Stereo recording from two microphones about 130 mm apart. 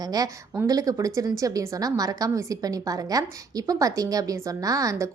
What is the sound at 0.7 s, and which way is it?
A woman's voice, 25° right (ahead or behind).